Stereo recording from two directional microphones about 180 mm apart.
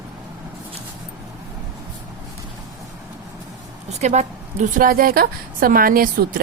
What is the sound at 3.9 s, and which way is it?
Speech, 40° right (ahead or behind).